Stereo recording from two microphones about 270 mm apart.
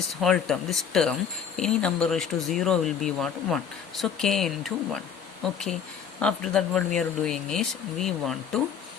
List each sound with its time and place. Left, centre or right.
0.1 s speech: centre